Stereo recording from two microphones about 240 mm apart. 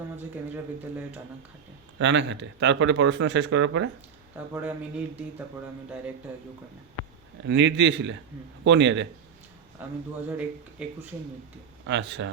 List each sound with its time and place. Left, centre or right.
2.0 s speech: right
4.4 s speech: centre
7.4 s speech: right
9.8 s speech: centre
11.9 s speech: right